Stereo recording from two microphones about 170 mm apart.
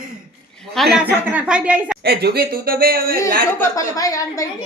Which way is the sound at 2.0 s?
70° right (ahead or behind).